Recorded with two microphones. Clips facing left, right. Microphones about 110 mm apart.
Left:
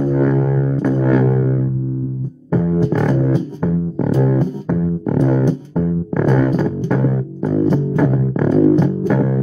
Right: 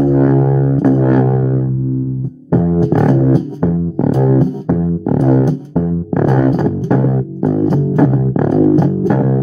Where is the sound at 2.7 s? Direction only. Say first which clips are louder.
Right 4 dB; 15° right (ahead or behind).